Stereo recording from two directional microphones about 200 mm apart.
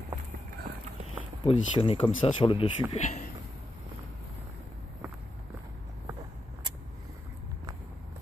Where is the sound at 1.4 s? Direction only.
25° left (ahead or behind).